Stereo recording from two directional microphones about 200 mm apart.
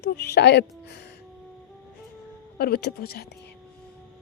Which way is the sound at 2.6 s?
55° left (ahead or behind).